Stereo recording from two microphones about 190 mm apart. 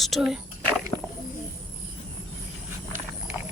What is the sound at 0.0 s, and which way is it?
Speech, centre (ahead or behind).